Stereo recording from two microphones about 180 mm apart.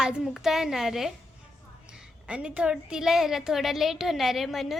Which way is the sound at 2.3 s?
5° right (ahead or behind).